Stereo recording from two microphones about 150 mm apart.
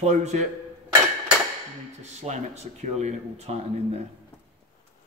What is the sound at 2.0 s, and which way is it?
A man's voice, 50° right (ahead or behind).